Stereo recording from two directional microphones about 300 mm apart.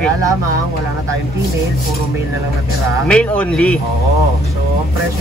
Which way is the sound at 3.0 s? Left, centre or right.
Centre.